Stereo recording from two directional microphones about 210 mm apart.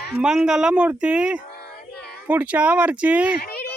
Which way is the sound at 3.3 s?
45° left (ahead or behind).